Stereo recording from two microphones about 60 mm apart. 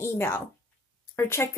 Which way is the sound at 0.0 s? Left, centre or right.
Left.